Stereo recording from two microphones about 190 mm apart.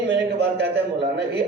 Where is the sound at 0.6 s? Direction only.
60° right (ahead or behind).